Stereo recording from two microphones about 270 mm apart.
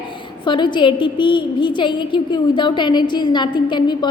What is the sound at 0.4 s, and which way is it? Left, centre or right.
A woman's voice, centre.